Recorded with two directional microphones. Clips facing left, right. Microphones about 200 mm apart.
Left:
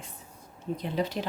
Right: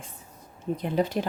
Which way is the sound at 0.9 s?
50° right (ahead or behind).